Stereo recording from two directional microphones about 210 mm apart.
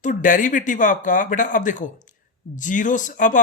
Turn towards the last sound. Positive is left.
turn(degrees=40)  # may be behind; listen again after turning